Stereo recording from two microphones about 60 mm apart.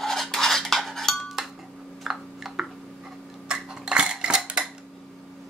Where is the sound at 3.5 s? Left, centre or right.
Centre.